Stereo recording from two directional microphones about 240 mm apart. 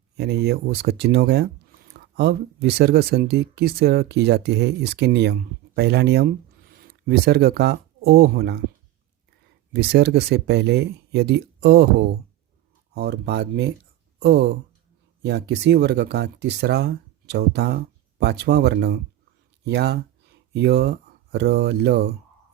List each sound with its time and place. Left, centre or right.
0.2 s speech: right
9.7 s speech: right